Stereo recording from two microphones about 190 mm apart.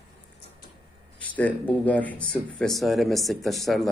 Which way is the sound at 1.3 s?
10° left (ahead or behind).